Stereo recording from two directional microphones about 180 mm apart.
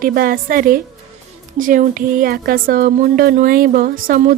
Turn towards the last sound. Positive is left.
turn(degrees=-50)  # may be behind; listen again after turning